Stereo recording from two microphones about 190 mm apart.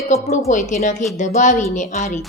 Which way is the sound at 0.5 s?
40° left (ahead or behind).